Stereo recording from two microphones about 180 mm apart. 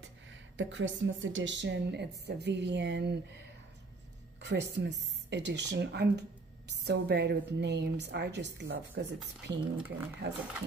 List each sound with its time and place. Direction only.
0.0 s a woman's voice: 90° right; by 9.9 s 65° right (ahead or behind)